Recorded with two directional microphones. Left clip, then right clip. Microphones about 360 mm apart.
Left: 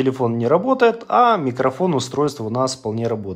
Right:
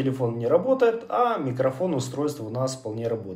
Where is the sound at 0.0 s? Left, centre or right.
Centre.